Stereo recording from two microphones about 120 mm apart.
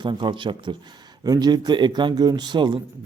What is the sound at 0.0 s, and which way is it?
Speech, 40° right (ahead or behind).